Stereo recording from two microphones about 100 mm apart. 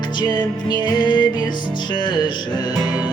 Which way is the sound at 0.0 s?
50° left (ahead or behind).